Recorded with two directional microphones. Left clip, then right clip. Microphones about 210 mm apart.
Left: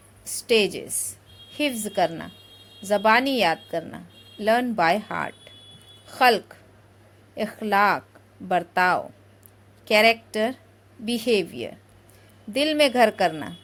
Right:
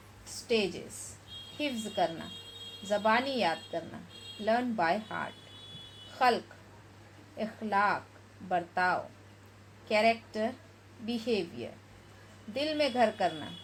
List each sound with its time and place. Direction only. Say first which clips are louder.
0.4 s a woman's voice: left 10 dB; 40° left (ahead or behind)